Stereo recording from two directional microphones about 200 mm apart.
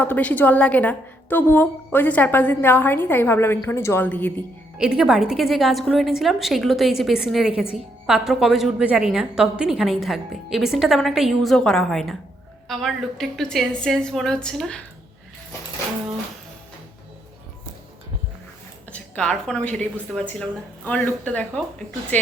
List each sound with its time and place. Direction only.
0.0 s a woman's voice: 10° left (ahead or behind)
4.8 s a woman's voice: 5° right (ahead or behind)
18.9 s a woman's voice: 5° left (ahead or behind)